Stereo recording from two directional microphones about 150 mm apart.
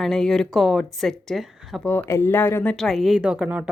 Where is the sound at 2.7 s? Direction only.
Centre (ahead or behind).